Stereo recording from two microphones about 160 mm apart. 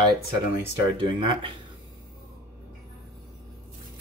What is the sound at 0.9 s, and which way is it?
Speech, 30° right (ahead or behind).